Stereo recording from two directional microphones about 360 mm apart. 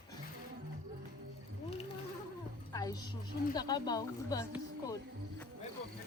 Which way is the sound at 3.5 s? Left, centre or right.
Centre.